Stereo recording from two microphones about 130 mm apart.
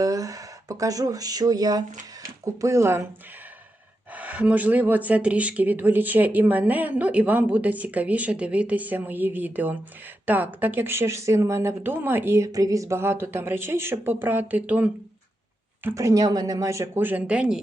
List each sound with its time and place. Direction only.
0.0 s speech: 25° right (ahead or behind)
4.1 s speech: 10° right (ahead or behind)